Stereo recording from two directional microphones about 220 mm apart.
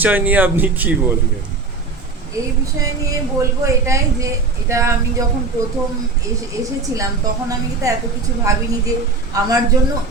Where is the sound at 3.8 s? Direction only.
15° right (ahead or behind).